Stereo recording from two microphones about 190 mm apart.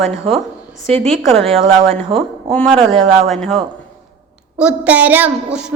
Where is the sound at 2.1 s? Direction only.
5° left (ahead or behind).